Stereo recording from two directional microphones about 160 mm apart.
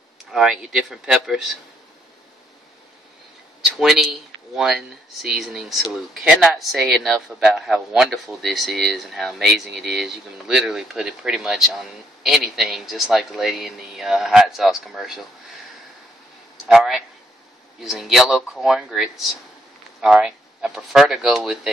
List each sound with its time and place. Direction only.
0.3 s speech: 5° right (ahead or behind)
3.6 s speech: centre (ahead or behind)
16.6 s speech: centre (ahead or behind)